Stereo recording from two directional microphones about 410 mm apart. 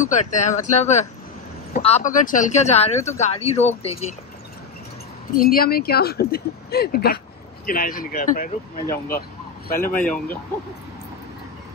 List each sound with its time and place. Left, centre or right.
0.0 s speech: centre
5.4 s speech: left
9.9 s speech: centre